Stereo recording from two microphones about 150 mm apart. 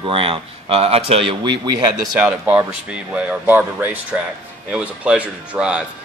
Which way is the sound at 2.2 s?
10° right (ahead or behind).